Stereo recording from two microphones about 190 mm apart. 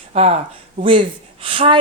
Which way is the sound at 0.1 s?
35° right (ahead or behind).